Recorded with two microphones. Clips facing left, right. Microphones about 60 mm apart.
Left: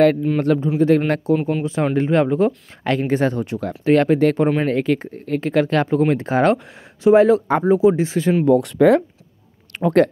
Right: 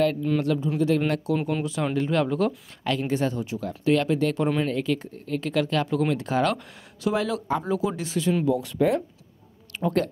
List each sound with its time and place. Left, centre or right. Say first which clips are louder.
0.4 s speech: left 7 dB; left
1.3 s speech: left 6 dB; left
2.8 s speech: left 6 dB; left
3.8 s speech: left 7 dB; left
8.5 s speech: left 9 dB; left
9.7 s speech: left 9 dB; left